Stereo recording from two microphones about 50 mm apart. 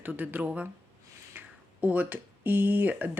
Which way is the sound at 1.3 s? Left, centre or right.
Right.